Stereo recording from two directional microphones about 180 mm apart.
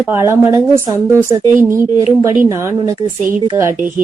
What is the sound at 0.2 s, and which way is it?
A woman's voice, 15° right (ahead or behind).